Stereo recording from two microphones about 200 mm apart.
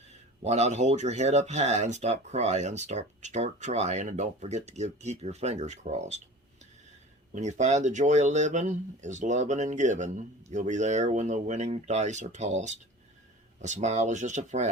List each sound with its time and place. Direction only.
0.4 s speech: 35° right (ahead or behind)
7.3 s speech: 35° right (ahead or behind)